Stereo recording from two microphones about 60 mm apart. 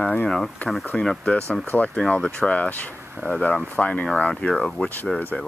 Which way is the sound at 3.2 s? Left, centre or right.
Right.